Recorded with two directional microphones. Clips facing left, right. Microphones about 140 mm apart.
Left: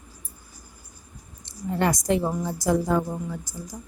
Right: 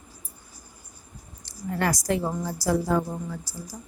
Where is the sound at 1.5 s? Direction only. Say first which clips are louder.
Left 2 dB; 20° left (ahead or behind).